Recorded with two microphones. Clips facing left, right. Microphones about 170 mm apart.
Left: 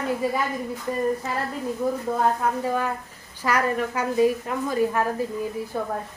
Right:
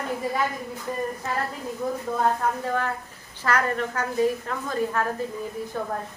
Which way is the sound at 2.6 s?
10° left (ahead or behind).